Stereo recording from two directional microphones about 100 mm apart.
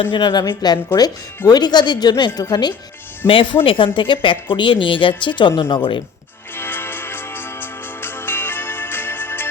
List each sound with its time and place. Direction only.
0.1 s speech: 50° left (ahead or behind)
3.2 s speech: 60° left (ahead or behind)
6.6 s music: 20° left (ahead or behind)